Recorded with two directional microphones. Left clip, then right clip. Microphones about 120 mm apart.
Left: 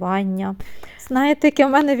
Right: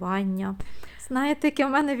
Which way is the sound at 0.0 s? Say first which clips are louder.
Left 6 dB; 20° left (ahead or behind).